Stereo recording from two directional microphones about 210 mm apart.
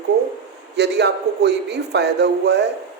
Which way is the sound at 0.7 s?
55° right (ahead or behind).